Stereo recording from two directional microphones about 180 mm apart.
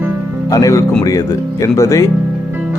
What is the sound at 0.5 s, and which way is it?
Speech, 20° left (ahead or behind).